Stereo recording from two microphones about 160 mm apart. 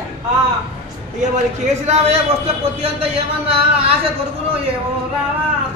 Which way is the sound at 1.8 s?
40° right (ahead or behind).